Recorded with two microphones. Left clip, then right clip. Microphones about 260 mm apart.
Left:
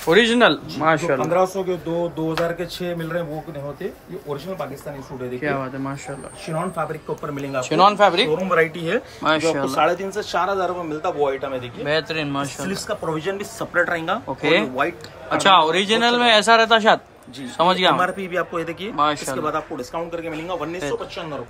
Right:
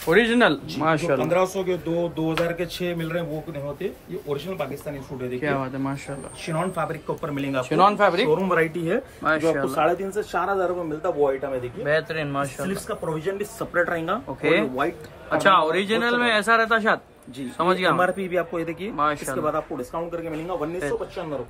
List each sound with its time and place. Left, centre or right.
0.0 s speech: centre